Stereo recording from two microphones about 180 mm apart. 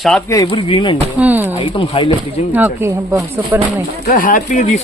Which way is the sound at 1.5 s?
25° left (ahead or behind).